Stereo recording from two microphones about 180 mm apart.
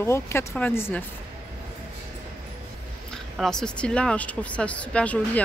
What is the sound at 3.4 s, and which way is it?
Speech, 5° left (ahead or behind).